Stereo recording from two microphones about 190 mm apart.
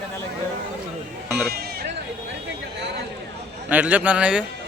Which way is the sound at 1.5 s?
55° right (ahead or behind).